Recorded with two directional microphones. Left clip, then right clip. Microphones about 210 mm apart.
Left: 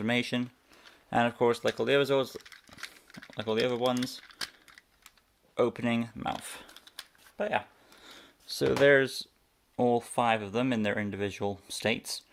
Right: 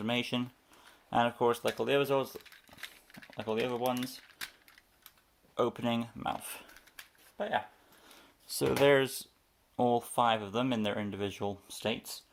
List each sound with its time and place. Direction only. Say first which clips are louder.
0.0 s speech: left 3 dB; 20° left (ahead or behind)
2.3 s crumpling: left 3 dB; 15° left (ahead or behind)
3.3 s speech: left 4 dB; 35° left (ahead or behind)
5.5 s speech: left 3 dB; 25° left (ahead or behind)
6.4 s a sound: left 2 dB; 25° left (ahead or behind)
7.3 s speech: left 3 dB; 45° left (ahead or behind)
8.4 s speech: left 3 dB; 10° left (ahead or behind); by 12.2 s 30° left (ahead or behind)